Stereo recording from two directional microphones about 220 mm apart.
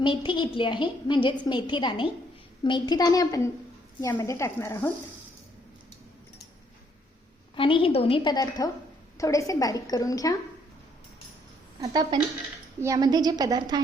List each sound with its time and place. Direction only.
0.0 s a woman's voice: 20° left (ahead or behind)
7.5 s a woman's voice: 25° left (ahead or behind)
12.1 s a woman's voice: 20° right (ahead or behind)